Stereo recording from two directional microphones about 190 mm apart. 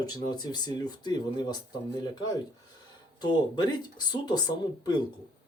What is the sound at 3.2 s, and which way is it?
Speech, 20° left (ahead or behind).